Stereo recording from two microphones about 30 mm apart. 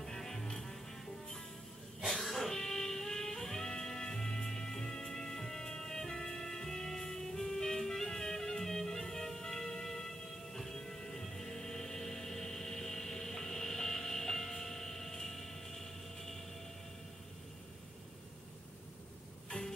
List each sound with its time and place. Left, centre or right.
0.0 s music: centre
2.0 s cough: centre
2.5 s music: centre
19.5 s music: left